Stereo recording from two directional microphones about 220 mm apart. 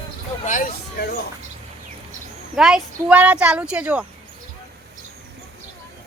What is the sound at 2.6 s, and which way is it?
Speech, centre (ahead or behind).